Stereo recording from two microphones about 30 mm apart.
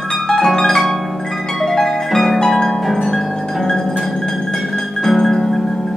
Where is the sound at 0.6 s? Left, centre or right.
Centre.